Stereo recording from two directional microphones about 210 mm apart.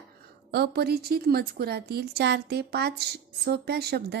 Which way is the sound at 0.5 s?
50° right (ahead or behind).